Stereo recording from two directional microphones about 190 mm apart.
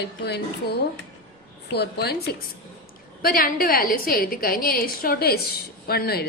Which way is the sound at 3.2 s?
50° left (ahead or behind).